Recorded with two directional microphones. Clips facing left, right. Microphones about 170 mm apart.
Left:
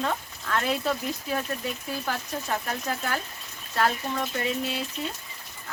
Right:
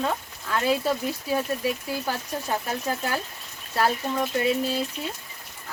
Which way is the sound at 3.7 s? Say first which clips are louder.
Right 2 dB; 10° right (ahead or behind).